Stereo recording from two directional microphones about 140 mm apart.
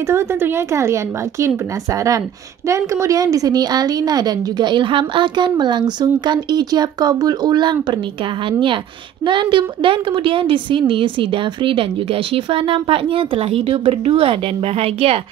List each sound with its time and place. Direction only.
0.1 s a woman's voice: 20° right (ahead or behind)
2.7 s a woman's voice: 20° right (ahead or behind)
9.2 s a woman's voice: 35° right (ahead or behind)